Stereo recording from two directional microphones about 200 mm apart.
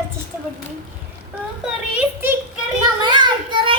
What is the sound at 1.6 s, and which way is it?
Speech, 10° right (ahead or behind).